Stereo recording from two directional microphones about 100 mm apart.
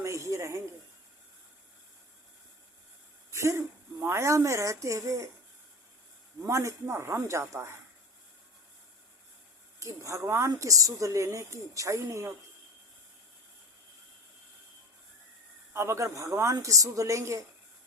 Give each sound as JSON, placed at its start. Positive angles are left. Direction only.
{"t": 0.0, "sound": "a sound", "side_deg": -30}
{"t": 3.3, "sound": "a woman's voice", "side_deg": -30}
{"t": 6.4, "sound": "speech", "side_deg": -30}
{"t": 9.8, "sound": "a woman's voice", "side_deg": -30}
{"t": 15.7, "sound": "a woman's voice", "side_deg": -25}